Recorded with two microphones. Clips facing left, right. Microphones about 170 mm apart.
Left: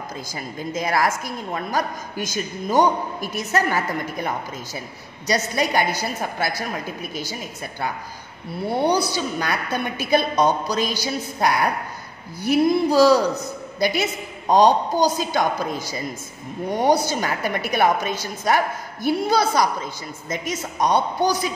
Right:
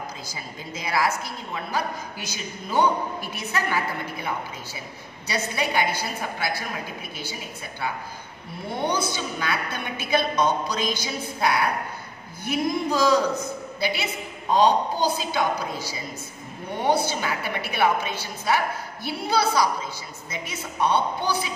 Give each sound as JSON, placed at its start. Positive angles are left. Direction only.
{"t": 0.3, "sound": "a woman's voice", "side_deg": 50}
{"t": 8.6, "sound": "a woman's voice", "side_deg": 35}
{"t": 20.8, "sound": "a woman's voice", "side_deg": 40}